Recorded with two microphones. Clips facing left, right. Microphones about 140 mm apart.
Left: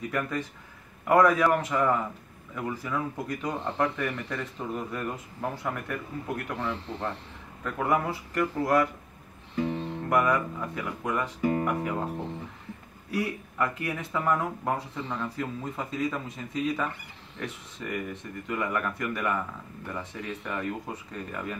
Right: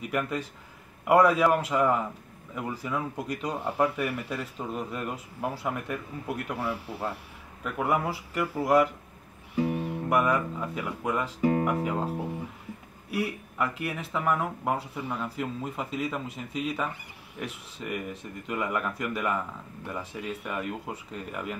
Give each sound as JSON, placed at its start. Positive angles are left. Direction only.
{"t": 0.0, "sound": "speech", "side_deg": -15}